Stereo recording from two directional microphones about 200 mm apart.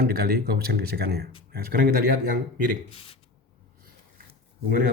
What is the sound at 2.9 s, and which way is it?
Speech, 30° left (ahead or behind).